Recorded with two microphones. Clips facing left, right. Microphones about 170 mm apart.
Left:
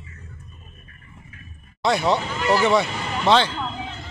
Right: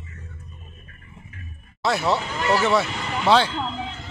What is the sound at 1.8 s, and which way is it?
Speech, 5° right (ahead or behind).